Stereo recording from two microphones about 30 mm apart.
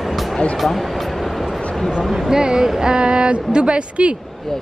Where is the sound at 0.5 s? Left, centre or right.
Centre.